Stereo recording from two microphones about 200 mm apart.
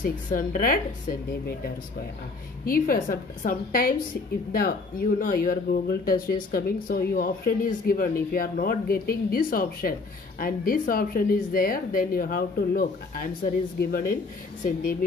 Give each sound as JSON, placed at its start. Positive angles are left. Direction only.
{"t": 0.0, "sound": "speech", "side_deg": 45}
{"t": 2.6, "sound": "speech", "side_deg": 45}